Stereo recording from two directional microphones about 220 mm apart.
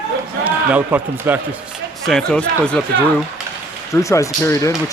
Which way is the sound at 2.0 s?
5° left (ahead or behind).